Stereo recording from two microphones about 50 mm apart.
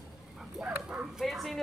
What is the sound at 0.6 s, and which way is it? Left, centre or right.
Speech, right.